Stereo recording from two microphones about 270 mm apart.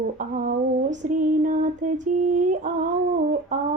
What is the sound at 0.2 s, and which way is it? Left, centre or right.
Female singing, right.